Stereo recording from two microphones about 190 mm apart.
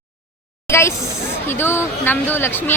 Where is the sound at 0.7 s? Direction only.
15° left (ahead or behind).